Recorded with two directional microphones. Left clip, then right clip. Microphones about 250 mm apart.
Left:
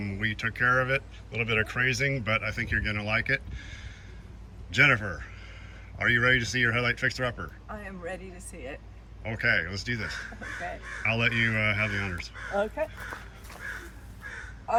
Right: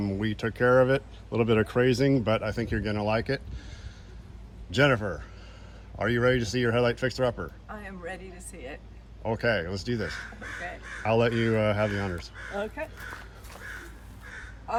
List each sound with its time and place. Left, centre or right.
0.0 s speech: centre
4.7 s speech: centre
10.4 s speech: centre
11.0 s speech: centre
12.5 s speech: centre